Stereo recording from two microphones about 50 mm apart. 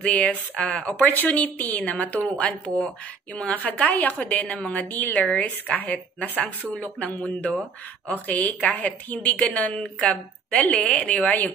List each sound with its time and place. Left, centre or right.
0.0 s a woman's voice: left
1.0 s a woman's voice: left
4.6 s a woman's voice: centre